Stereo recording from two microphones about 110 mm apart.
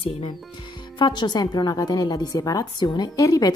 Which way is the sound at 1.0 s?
45° left (ahead or behind).